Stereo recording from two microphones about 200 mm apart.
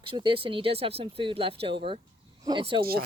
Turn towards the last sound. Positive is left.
turn(degrees=-50)  # may be behind; listen again after turning